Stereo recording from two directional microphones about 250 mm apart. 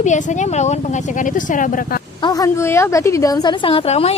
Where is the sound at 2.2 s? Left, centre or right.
Centre.